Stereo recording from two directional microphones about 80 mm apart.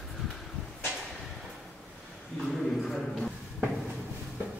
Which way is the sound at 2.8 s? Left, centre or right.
Centre.